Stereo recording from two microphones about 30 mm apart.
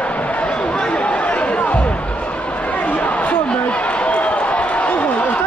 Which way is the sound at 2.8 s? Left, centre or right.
Left.